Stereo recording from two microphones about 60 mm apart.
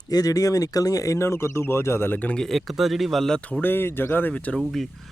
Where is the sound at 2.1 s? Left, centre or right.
Left.